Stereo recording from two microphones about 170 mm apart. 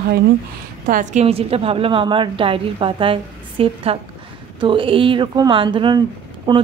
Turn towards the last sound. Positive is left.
turn(degrees=-30)  # may be behind; listen again after turning